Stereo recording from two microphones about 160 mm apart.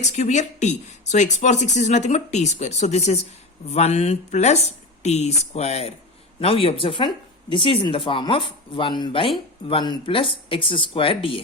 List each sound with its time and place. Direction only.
0.0 s speech: 50° left (ahead or behind)